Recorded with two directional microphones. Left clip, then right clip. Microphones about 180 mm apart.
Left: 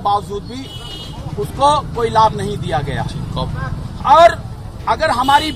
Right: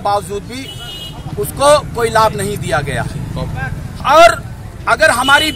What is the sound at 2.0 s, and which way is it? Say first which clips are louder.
A man's voice: right 1 dB; 10° right (ahead or behind).